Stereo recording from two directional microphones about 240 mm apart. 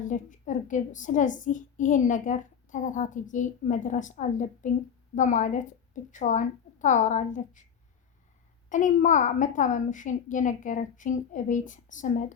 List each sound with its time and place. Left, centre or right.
0.0 s a woman's voice: left
8.7 s a woman's voice: left